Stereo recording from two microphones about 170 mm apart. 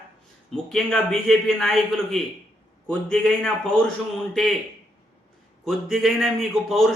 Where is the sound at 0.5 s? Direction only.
5° left (ahead or behind).